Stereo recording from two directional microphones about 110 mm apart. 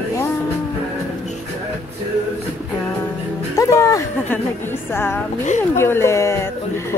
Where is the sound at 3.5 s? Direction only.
30° left (ahead or behind).